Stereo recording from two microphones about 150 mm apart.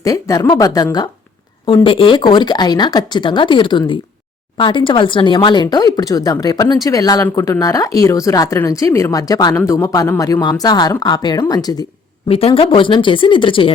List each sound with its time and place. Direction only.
0.0 s speech: 25° left (ahead or behind)
12.3 s speech: 40° left (ahead or behind)